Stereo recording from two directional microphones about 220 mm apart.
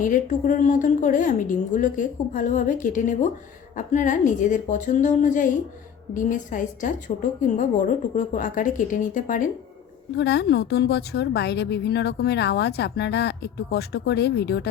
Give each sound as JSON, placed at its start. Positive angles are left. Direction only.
{"t": 0.0, "sound": "a woman's voice", "side_deg": 35}
{"t": 10.2, "sound": "a woman's voice", "side_deg": 50}